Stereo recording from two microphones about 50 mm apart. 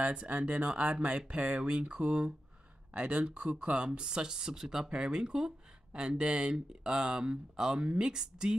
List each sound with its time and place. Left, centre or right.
0.0 s speech: right